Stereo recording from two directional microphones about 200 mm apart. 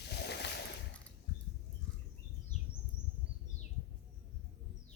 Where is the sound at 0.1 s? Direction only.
55° left (ahead or behind).